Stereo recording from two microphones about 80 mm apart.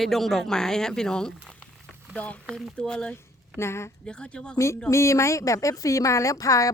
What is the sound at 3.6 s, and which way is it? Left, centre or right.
Speech, left.